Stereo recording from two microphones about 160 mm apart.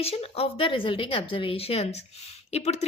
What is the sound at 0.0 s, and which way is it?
A woman's voice, 40° left (ahead or behind).